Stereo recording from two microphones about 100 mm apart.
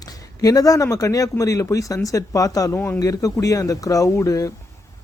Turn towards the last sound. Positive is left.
turn(degrees=35)  # may be behind; listen again after turning